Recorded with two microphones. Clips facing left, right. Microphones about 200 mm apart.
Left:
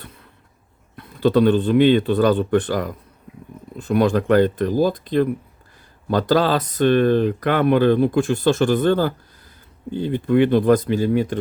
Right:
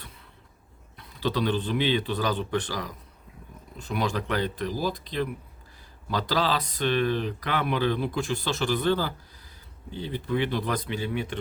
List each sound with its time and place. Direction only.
0.9 s speech: 55° left (ahead or behind)